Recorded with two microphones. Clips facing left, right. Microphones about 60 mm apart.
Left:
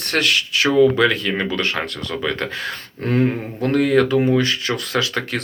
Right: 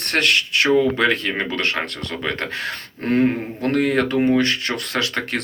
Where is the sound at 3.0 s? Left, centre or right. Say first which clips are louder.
Right 1 dB; right.